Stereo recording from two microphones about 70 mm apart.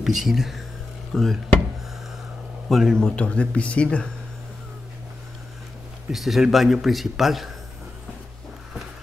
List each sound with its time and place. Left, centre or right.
0.0 s a man's voice: centre
2.7 s speech: centre
6.1 s a man's voice: centre